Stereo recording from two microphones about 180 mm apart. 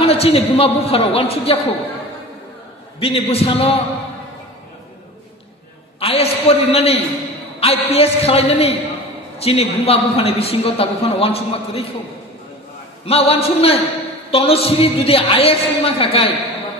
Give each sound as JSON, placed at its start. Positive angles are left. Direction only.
{"t": 0.0, "sound": "a man's voice", "side_deg": 35}
{"t": 3.0, "sound": "a man's voice", "side_deg": 35}
{"t": 5.9, "sound": "a man's voice", "side_deg": 35}
{"t": 13.0, "sound": "a man's voice", "side_deg": 35}